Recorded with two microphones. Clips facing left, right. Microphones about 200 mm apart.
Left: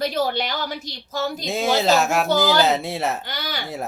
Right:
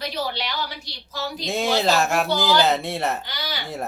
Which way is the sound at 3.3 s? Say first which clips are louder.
Left 2 dB; 50° left (ahead or behind).